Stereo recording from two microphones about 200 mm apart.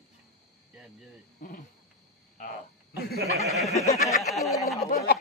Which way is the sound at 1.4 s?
40° left (ahead or behind).